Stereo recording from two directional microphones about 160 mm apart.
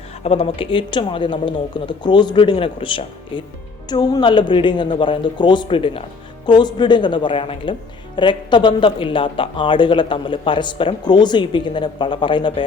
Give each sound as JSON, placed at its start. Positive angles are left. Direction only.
{"t": 0.3, "sound": "speech", "side_deg": 35}